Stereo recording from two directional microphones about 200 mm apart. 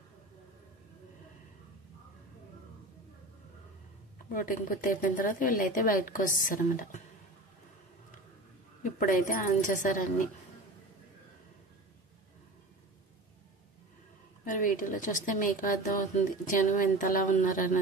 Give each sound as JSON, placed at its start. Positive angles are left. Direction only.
{"t": 4.3, "sound": "a woman's voice", "side_deg": 45}
{"t": 8.8, "sound": "a woman's voice", "side_deg": 40}
{"t": 14.4, "sound": "a woman's voice", "side_deg": 40}